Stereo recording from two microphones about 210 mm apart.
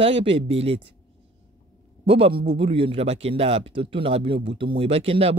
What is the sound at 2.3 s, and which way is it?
Speech, 55° right (ahead or behind).